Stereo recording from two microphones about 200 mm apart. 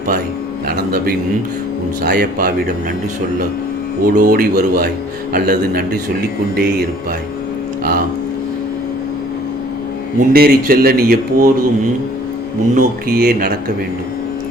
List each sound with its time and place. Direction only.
0.9 s speech: 45° right (ahead or behind)
4.0 s speech: 45° right (ahead or behind)
10.2 s speech: 50° right (ahead or behind)
12.7 s speech: 50° right (ahead or behind)